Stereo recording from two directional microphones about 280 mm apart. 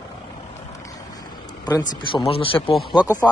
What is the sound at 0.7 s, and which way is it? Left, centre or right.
Vehicle, centre.